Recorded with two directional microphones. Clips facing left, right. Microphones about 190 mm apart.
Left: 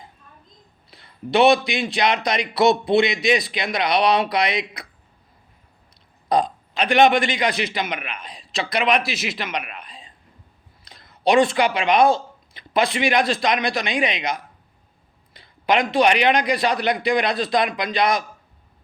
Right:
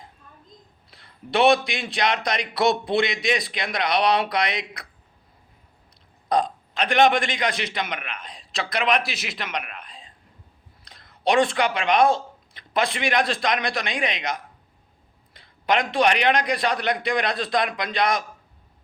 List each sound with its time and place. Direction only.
0.9 s speech: centre (ahead or behind)
6.2 s speech: 5° left (ahead or behind)